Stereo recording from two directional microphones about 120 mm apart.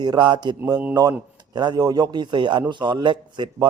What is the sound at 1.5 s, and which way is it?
A man's voice, 35° right (ahead or behind).